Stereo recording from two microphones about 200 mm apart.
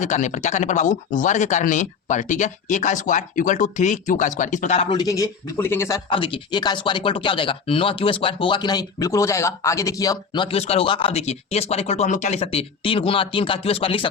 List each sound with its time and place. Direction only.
0.0 s speech: 35° left (ahead or behind)
4.9 s speech: 20° left (ahead or behind)
6.1 s speech: 25° left (ahead or behind)